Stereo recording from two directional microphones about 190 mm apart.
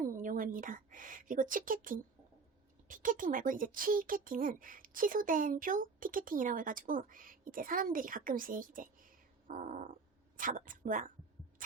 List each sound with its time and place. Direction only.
0.0 s a woman's voice: 45° right (ahead or behind)